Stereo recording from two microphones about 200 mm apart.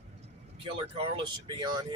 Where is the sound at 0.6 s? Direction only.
25° right (ahead or behind).